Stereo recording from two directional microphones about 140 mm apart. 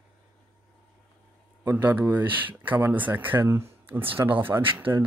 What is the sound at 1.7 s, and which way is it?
Speech, 10° right (ahead or behind).